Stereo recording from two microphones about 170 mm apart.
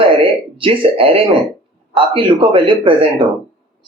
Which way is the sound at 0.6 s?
30° right (ahead or behind).